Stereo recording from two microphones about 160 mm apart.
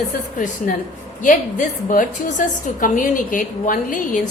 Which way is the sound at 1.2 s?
55° left (ahead or behind).